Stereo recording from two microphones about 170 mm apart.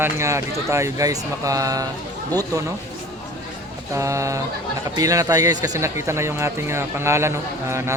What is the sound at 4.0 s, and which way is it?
Speech, 20° right (ahead or behind).